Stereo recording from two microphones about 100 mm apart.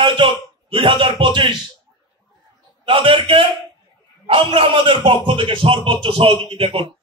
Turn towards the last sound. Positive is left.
turn(degrees=-55)  # may be behind; listen again after turning